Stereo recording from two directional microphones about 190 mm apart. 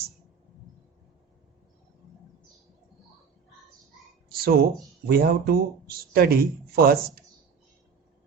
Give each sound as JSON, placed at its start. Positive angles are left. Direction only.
{"t": 4.3, "sound": "speech", "side_deg": -50}